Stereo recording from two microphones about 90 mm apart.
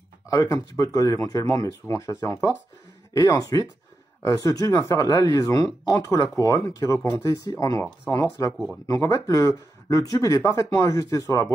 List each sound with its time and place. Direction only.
0.7 s speech: 40° left (ahead or behind)